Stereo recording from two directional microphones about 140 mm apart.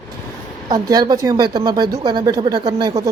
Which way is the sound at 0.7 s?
30° right (ahead or behind).